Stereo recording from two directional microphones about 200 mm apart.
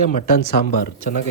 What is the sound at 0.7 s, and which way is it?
Speech, 50° left (ahead or behind).